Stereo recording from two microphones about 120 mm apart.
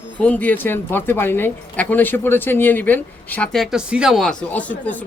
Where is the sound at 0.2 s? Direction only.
10° left (ahead or behind).